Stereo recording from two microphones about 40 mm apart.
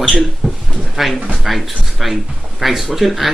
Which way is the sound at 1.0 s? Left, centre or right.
Centre.